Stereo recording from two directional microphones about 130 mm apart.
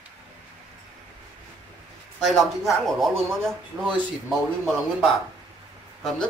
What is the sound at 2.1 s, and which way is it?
Speech, centre (ahead or behind).